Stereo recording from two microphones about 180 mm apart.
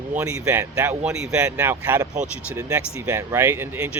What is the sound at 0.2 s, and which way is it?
Speech, 15° right (ahead or behind).